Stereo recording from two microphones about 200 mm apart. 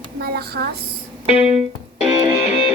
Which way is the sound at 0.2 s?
50° right (ahead or behind).